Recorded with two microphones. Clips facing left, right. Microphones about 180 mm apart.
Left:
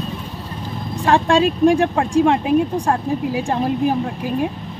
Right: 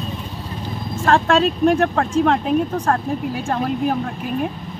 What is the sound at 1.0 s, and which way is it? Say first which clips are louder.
Speech: left 1 dB; 15° left (ahead or behind).